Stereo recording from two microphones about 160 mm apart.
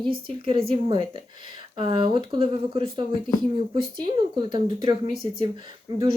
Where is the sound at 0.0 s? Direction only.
30° right (ahead or behind).